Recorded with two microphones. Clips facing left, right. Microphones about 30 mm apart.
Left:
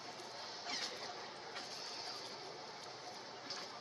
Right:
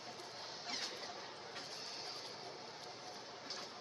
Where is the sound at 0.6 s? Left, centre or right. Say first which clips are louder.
Left 1 dB; centre.